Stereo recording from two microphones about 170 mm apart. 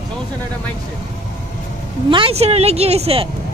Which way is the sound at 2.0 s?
30° right (ahead or behind).